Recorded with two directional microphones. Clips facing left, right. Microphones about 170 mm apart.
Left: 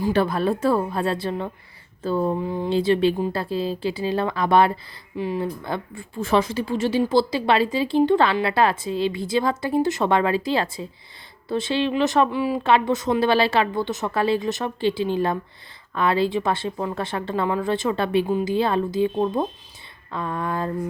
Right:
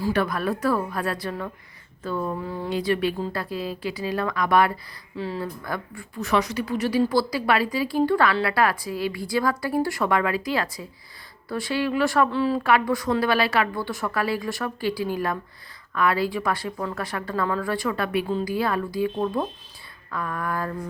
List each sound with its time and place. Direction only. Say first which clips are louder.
0.0 s speech: left 3 dB; 30° left (ahead or behind)
5.1 s speech: left 4 dB; 15° left (ahead or behind)
12.6 s speech: left 2 dB; 25° left (ahead or behind)